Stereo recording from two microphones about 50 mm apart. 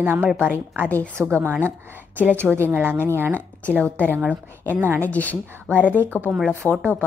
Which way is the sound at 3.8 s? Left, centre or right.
Left.